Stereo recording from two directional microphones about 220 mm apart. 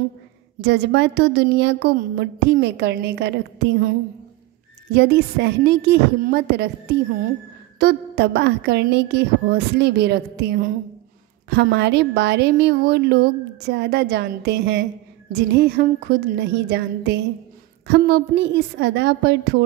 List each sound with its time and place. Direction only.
0.6 s a woman's voice: 50° right (ahead or behind)
4.9 s a woman's voice: 50° right (ahead or behind)